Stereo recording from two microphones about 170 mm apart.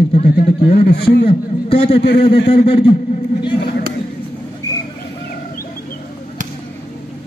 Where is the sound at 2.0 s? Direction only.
70° left (ahead or behind).